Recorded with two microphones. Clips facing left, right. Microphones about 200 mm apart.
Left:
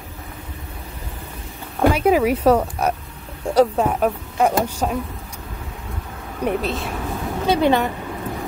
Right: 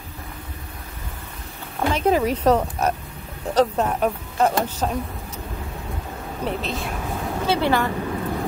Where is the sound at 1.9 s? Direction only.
10° left (ahead or behind).